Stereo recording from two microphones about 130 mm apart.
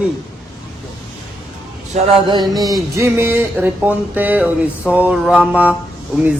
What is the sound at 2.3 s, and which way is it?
Speech, 30° right (ahead or behind).